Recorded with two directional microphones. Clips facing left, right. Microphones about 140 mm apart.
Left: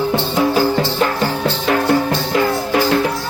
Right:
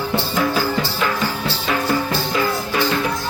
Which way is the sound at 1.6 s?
55° left (ahead or behind).